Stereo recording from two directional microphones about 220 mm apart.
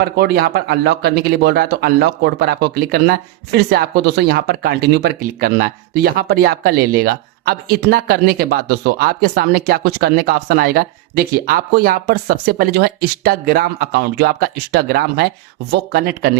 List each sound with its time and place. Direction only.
0.2 s speech: 45° right (ahead or behind)